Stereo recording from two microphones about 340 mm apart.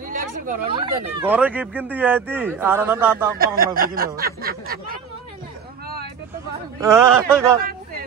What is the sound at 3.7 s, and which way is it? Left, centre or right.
A man's voice, right.